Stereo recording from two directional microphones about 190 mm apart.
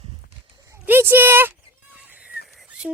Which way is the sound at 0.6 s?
15° right (ahead or behind).